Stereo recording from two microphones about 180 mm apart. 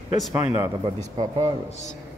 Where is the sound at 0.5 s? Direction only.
25° right (ahead or behind).